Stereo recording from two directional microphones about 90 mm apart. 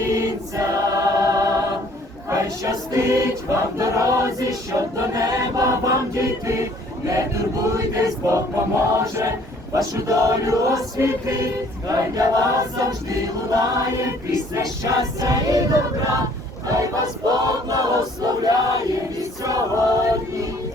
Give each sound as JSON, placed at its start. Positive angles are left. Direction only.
{"t": 0.1, "sound": "choir", "side_deg": -35}